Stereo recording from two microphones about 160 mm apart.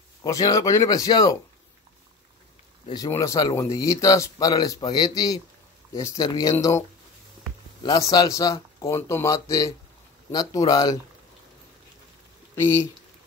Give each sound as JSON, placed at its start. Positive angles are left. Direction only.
{"t": 0.2, "sound": "speech", "side_deg": 20}
{"t": 2.9, "sound": "speech", "side_deg": 20}
{"t": 7.8, "sound": "speech", "side_deg": 25}
{"t": 12.5, "sound": "speech", "side_deg": 15}